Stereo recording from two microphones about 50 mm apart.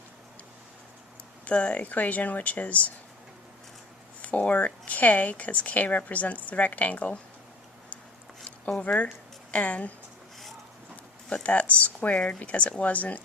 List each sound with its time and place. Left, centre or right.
1.5 s a woman's voice: left
4.2 s a woman's voice: left
8.9 s speech: left
11.3 s speech: left